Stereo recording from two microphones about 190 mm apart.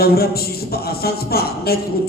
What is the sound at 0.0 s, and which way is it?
A man's voice, 55° left (ahead or behind).